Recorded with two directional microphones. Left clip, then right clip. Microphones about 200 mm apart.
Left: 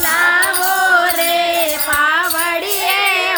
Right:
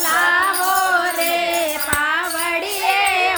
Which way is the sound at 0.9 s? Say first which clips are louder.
Left 5 dB; 5° left (ahead or behind).